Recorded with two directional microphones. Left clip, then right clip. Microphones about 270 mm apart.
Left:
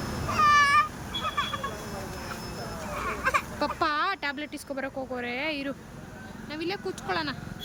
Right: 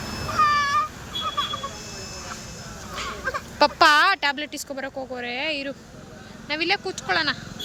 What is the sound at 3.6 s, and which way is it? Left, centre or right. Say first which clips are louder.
Speech: right 15 dB; centre.